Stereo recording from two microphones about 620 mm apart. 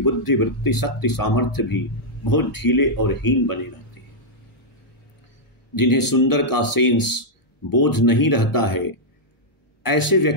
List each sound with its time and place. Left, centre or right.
0.0 s speech: left
5.8 s speech: left